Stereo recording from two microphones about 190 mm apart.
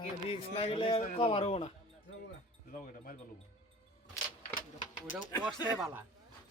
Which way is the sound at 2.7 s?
45° left (ahead or behind).